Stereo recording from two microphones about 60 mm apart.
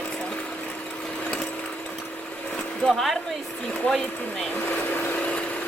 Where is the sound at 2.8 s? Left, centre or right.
Centre.